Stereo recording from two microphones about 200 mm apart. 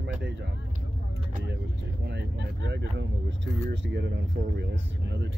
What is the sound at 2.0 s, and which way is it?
Speech, 60° right (ahead or behind).